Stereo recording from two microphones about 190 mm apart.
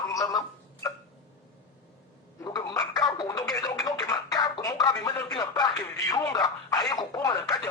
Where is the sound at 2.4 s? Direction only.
20° left (ahead or behind).